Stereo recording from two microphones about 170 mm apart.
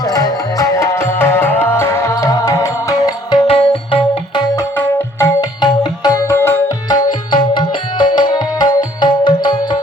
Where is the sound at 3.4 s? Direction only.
35° left (ahead or behind).